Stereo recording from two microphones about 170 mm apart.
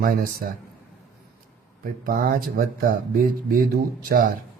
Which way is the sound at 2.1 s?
60° right (ahead or behind).